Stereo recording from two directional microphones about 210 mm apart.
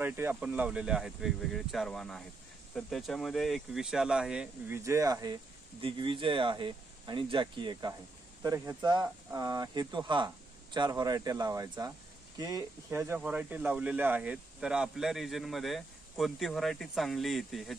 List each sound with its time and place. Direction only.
0.0 s speech: 10° right (ahead or behind)